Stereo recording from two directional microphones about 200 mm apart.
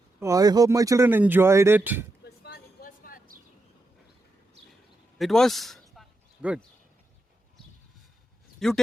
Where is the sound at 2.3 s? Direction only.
55° left (ahead or behind).